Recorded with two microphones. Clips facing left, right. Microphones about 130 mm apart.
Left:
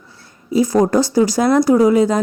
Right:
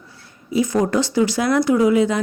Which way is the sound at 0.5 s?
40° left (ahead or behind).